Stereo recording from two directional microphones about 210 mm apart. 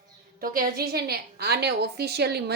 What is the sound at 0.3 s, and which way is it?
A woman's voice, 45° right (ahead or behind).